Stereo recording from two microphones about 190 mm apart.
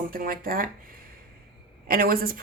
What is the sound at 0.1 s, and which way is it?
Speech, 50° right (ahead or behind).